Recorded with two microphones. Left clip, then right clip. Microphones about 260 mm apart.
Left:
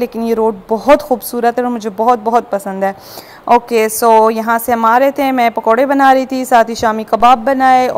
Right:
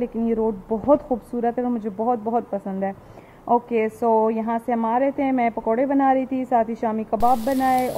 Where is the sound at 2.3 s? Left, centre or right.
Centre.